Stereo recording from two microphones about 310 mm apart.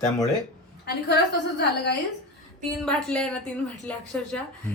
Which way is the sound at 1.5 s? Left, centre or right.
Left.